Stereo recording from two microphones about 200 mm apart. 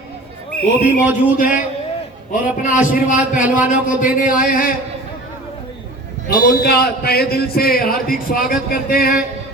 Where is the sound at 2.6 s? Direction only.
40° left (ahead or behind).